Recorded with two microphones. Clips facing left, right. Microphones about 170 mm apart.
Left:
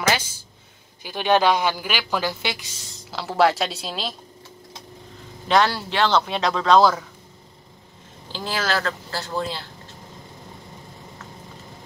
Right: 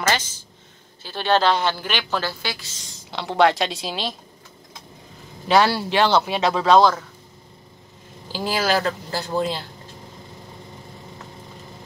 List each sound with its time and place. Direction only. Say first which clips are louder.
0.1 s a sound: even; 10° left (ahead or behind)
1.0 s a woman's voice: left 1 dB; 15° left (ahead or behind)
3.1 s a woman's voice: right 1 dB; centre (ahead or behind)
5.5 s a woman's voice: right 2 dB; 10° right (ahead or behind)
8.3 s speech: right 4 dB; 10° right (ahead or behind)